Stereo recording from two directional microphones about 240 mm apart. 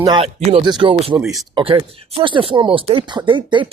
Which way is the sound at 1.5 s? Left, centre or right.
Right.